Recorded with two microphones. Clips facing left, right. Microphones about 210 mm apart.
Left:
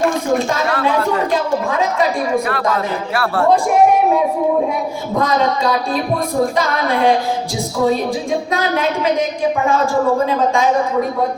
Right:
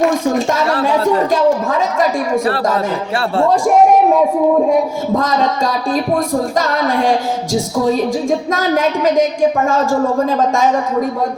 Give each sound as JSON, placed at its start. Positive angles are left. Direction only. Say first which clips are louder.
{"t": 1.3, "sound": "a woman's voice", "louder": "right 4 dB", "side_deg": -45}
{"t": 8.5, "sound": "a woman's voice", "louder": "right 3 dB", "side_deg": -45}
{"t": 10.2, "sound": "a woman's voice", "louder": "right 1 dB", "side_deg": -45}